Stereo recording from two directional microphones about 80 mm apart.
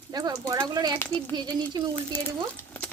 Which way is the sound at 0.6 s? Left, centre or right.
Right.